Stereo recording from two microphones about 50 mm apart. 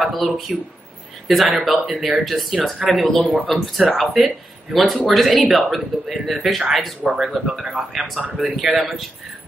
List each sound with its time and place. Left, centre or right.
0.0 s speech: centre
7.7 s a man's voice: centre
8.5 s speech: centre